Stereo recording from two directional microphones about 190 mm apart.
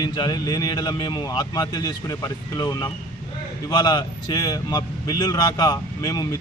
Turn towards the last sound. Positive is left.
turn(degrees=20)  # may be behind; listen again after turning